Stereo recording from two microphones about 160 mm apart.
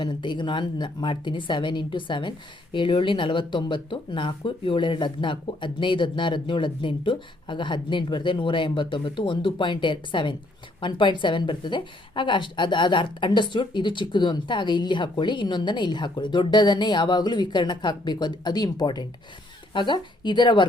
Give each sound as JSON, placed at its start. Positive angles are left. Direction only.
{"t": 0.0, "sound": "a woman's voice", "side_deg": 30}